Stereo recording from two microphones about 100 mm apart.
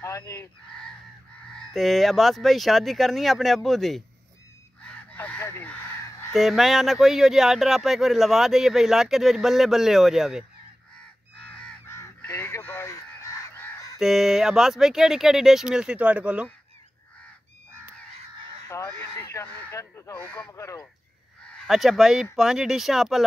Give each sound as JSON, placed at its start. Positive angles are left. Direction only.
{"t": 0.0, "sound": "fowl", "side_deg": 30}
{"t": 1.5, "sound": "speech", "side_deg": 0}
{"t": 5.1, "sound": "crow", "side_deg": 25}
{"t": 6.3, "sound": "speech", "side_deg": 0}
{"t": 11.3, "sound": "crow", "side_deg": 10}
{"t": 12.3, "sound": "fowl", "side_deg": 25}
{"t": 13.9, "sound": "speech", "side_deg": -5}
{"t": 18.9, "sound": "speech", "side_deg": 25}
{"t": 20.2, "sound": "speech", "side_deg": 15}
{"t": 20.5, "sound": "speech", "side_deg": 30}
{"t": 21.6, "sound": "speech", "side_deg": 0}